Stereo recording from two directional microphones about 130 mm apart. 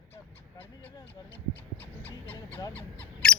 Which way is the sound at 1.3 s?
15° left (ahead or behind).